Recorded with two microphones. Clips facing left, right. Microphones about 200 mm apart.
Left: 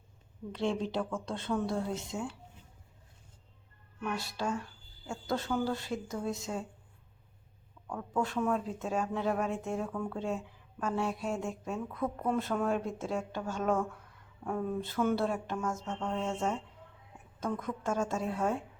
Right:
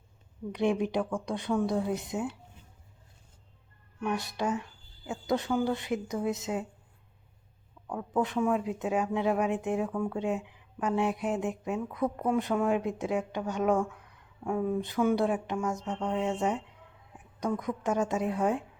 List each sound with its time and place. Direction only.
0.5 s a woman's voice: 15° right (ahead or behind)
4.0 s a woman's voice: 20° right (ahead or behind)
7.9 s a woman's voice: 20° right (ahead or behind)